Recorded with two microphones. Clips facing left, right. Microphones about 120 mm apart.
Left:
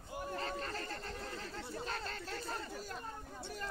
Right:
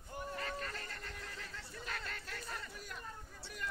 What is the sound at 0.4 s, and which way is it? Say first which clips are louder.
Chatter: left 3 dB; 30° left (ahead or behind).